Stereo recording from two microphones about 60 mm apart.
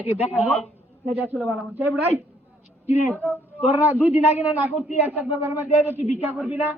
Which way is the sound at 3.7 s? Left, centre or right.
Right.